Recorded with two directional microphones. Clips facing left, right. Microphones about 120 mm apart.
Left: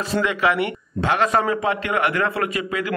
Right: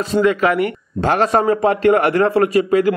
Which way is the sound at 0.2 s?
45° right (ahead or behind).